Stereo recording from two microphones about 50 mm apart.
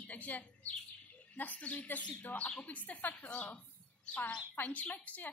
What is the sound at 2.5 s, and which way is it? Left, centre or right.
Speech, left.